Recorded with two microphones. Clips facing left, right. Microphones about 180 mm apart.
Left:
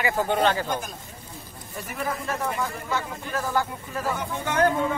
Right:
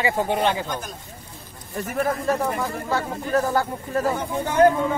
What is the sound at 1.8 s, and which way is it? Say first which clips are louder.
Speech: right 7 dB; 40° right (ahead or behind).